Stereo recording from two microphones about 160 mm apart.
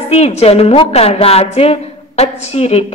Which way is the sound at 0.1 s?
40° left (ahead or behind).